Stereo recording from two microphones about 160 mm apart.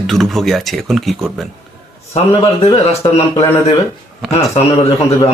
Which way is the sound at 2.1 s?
40° left (ahead or behind).